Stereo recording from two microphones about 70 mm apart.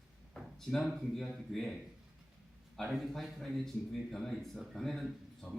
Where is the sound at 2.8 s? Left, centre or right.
Centre.